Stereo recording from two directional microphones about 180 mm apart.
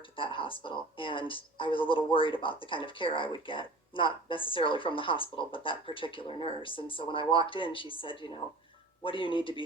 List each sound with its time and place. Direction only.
0.0 s speech: 30° left (ahead or behind)